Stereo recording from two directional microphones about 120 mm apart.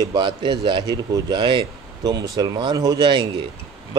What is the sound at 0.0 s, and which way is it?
Speech, 35° right (ahead or behind).